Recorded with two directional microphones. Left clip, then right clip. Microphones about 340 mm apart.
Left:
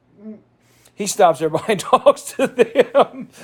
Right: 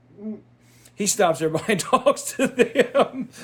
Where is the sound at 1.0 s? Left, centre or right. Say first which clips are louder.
Left 6 dB; centre.